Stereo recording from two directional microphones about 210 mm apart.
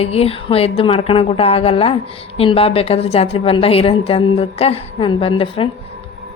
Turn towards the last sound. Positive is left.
turn(degrees=25)  # may be behind; listen again after turning